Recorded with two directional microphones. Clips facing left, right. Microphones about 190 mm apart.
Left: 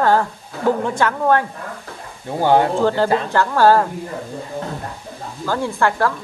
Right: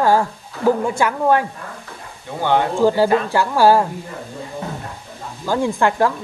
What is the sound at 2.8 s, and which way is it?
Speech, 10° right (ahead or behind).